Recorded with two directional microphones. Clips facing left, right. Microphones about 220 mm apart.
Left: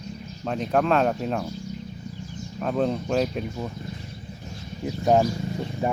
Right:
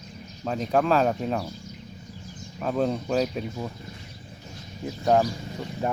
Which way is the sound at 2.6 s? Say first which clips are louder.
Left 1 dB; centre (ahead or behind).